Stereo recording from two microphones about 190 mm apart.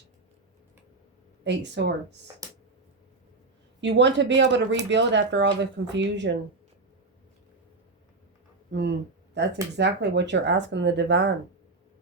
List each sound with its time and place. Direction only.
1.5 s speech: 65° right (ahead or behind)
3.8 s speech: 70° right (ahead or behind)
8.7 s speech: 65° right (ahead or behind)